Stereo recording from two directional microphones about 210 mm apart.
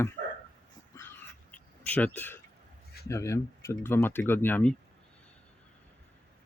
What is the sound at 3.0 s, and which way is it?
Speech, 15° left (ahead or behind).